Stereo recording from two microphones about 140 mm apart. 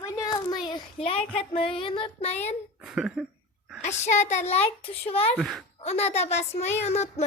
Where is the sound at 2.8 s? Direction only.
5° right (ahead or behind).